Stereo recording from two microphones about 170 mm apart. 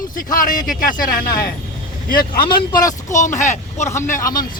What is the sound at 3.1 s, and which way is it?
A man's voice, 45° left (ahead or behind).